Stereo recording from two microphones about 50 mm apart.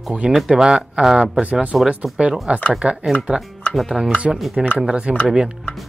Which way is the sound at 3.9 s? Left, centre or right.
Centre.